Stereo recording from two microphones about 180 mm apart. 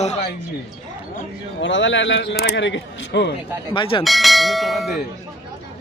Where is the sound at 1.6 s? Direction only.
90° left; by 3.3 s 75° left (ahead or behind).